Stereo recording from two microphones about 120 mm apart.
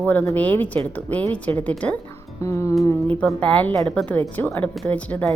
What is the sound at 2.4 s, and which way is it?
Music, 25° left (ahead or behind).